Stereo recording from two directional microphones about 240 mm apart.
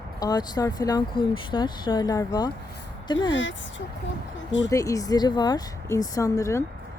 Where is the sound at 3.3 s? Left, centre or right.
Left.